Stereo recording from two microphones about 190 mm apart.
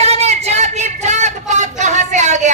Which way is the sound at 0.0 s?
35° right (ahead or behind).